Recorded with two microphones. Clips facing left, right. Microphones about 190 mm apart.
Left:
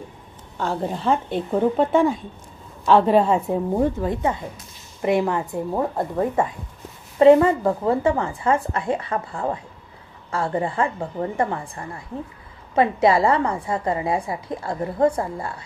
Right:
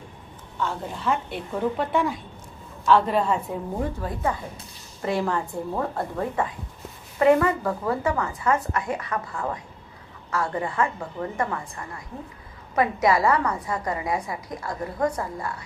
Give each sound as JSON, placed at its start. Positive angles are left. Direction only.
{"t": 0.6, "sound": "a woman's voice", "side_deg": 35}